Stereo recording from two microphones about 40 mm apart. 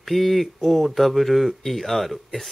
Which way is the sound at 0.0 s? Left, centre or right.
Centre.